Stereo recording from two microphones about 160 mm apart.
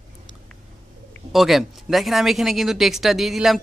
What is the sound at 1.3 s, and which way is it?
Speech, centre (ahead or behind).